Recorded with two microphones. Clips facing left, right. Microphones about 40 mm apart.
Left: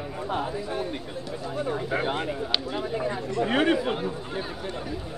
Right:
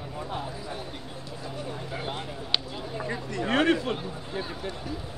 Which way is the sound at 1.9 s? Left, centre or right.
Left.